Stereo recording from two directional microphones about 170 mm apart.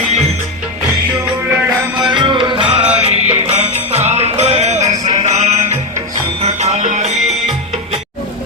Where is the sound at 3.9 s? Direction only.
40° right (ahead or behind).